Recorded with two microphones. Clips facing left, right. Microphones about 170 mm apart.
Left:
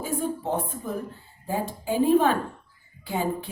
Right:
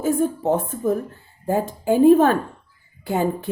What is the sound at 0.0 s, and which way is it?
A woman's voice, 45° right (ahead or behind).